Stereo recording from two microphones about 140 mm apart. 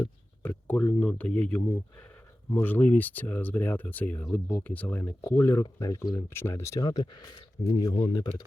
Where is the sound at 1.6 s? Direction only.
20° left (ahead or behind).